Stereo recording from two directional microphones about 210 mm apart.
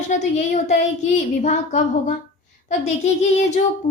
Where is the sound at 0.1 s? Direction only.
35° left (ahead or behind).